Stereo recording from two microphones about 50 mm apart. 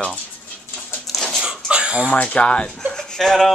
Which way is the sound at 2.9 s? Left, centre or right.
Centre.